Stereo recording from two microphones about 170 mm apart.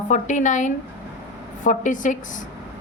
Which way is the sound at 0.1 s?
45° left (ahead or behind).